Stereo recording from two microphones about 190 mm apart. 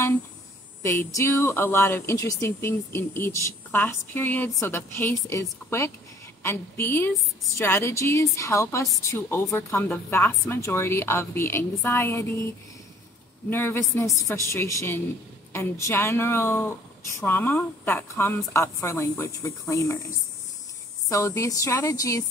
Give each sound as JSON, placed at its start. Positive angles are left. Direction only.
{"t": 0.8, "sound": "speech", "side_deg": 15}
{"t": 13.5, "sound": "speech", "side_deg": 10}
{"t": 21.1, "sound": "speech", "side_deg": 15}